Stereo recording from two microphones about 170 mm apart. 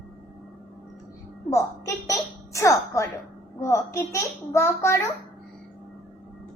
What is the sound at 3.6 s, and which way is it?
A child's voice, 15° left (ahead or behind).